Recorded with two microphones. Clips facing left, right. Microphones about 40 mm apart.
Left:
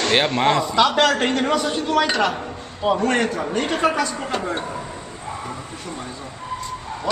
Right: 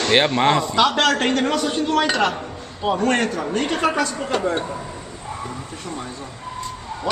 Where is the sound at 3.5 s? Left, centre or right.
Centre.